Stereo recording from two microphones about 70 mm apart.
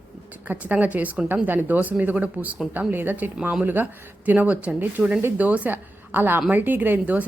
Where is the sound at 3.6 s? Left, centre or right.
Right.